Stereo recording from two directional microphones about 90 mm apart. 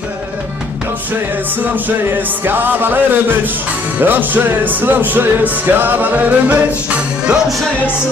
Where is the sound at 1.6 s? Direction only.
20° right (ahead or behind).